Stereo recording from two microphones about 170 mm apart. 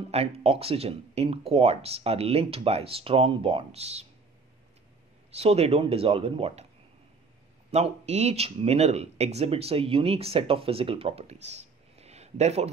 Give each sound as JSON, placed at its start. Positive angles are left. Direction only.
{"t": 0.1, "sound": "speech", "side_deg": -35}
{"t": 5.3, "sound": "speech", "side_deg": -35}
{"t": 7.7, "sound": "speech", "side_deg": -40}